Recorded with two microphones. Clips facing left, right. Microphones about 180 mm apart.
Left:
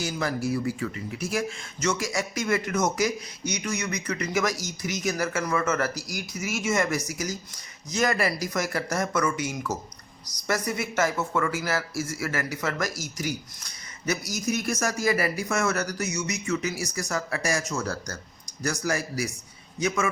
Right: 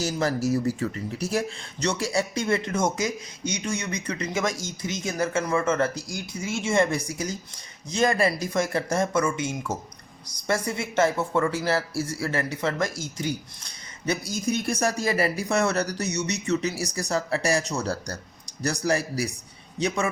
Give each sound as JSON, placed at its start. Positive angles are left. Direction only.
{"t": 0.0, "sound": "speech", "side_deg": -35}